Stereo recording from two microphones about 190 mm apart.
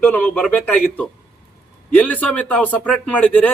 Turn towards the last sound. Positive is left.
turn(degrees=10)  # may be behind; listen again after turning